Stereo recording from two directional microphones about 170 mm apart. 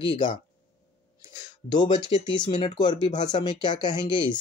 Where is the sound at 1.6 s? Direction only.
25° left (ahead or behind).